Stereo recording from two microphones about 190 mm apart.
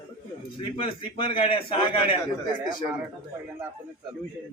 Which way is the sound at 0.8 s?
25° left (ahead or behind).